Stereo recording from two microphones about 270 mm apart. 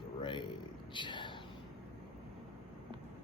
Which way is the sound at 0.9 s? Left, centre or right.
Centre.